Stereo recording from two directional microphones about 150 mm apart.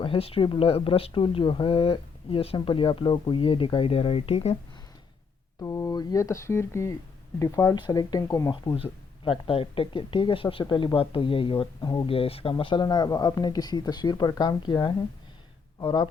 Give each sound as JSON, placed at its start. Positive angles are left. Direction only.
{"t": 0.0, "sound": "speech", "side_deg": 40}
{"t": 5.5, "sound": "speech", "side_deg": 20}